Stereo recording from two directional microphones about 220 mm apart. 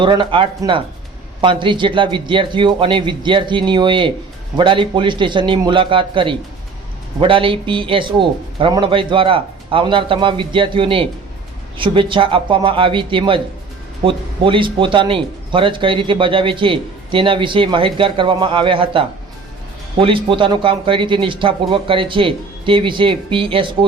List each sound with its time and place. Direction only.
0.0 s speech: 20° right (ahead or behind)